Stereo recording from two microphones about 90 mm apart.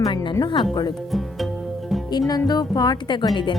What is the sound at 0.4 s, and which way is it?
Speech, 60° left (ahead or behind).